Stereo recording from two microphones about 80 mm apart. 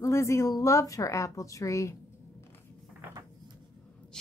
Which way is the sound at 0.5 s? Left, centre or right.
Left.